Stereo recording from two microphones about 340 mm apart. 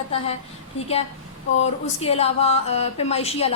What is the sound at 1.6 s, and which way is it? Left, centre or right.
A woman's voice, centre.